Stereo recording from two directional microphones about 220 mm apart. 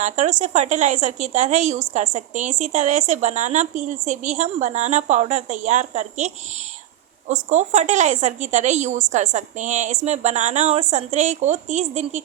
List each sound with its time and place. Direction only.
0.0 s a woman's voice: 30° right (ahead or behind)